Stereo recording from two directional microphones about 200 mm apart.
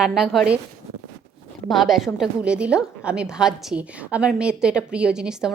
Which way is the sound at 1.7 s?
Centre (ahead or behind).